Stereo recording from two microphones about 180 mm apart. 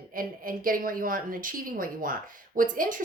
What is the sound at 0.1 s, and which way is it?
A woman's voice, 50° right (ahead or behind).